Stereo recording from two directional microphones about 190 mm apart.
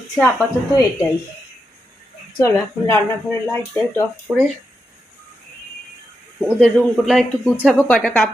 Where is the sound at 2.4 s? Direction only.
15° left (ahead or behind).